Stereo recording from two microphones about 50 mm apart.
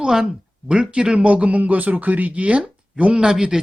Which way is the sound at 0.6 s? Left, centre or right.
Right.